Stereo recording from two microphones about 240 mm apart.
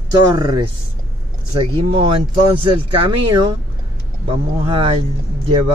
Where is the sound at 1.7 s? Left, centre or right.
Right.